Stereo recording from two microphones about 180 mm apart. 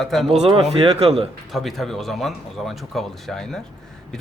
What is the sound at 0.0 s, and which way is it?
Speech, centre (ahead or behind).